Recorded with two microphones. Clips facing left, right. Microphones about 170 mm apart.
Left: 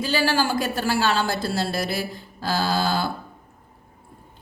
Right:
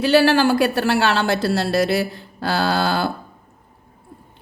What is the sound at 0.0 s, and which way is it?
Speech, 70° right (ahead or behind).